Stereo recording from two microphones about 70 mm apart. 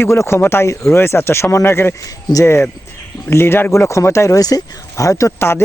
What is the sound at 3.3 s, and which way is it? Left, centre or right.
Speech, left.